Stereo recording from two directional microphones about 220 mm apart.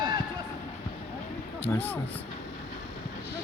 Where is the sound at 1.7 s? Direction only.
10° left (ahead or behind).